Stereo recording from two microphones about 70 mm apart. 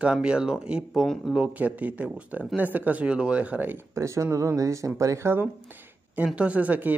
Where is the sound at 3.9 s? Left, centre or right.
Right.